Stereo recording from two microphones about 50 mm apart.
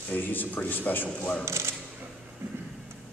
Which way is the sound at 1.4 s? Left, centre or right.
Right.